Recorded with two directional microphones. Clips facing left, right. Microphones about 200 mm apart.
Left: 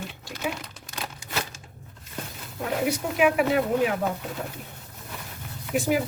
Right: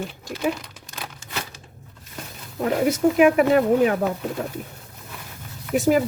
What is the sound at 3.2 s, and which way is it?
Speech, 45° right (ahead or behind).